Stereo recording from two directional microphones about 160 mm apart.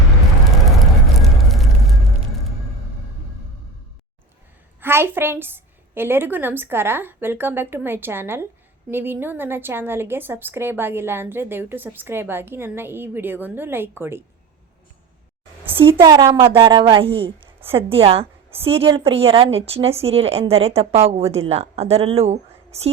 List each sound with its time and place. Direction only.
0.6 s a sound: centre (ahead or behind)
4.8 s a woman's voice: 15° right (ahead or behind)
15.6 s a woman's voice: 35° right (ahead or behind)